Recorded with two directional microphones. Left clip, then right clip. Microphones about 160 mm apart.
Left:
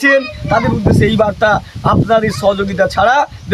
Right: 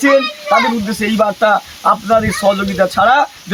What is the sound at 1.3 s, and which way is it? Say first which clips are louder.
Speech: even; 30° left (ahead or behind).